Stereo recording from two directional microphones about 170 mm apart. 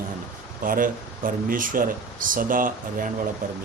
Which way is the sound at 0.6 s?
55° right (ahead or behind).